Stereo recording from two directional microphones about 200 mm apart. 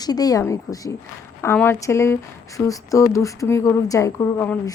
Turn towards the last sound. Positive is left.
turn(degrees=10)  # may be behind; listen again after turning